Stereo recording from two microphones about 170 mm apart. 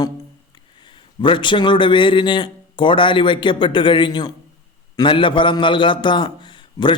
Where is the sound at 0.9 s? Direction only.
30° left (ahead or behind).